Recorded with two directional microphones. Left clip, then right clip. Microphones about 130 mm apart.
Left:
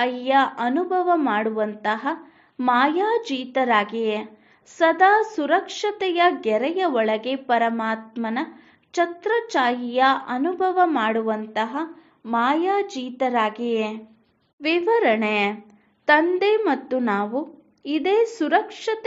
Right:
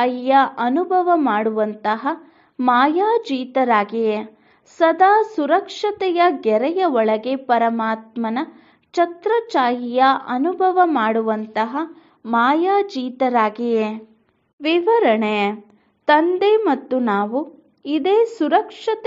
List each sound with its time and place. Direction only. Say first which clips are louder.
0.0 s a woman's voice: right 4 dB; 35° right (ahead or behind)
14.6 s a woman's voice: right 4 dB; 30° right (ahead or behind)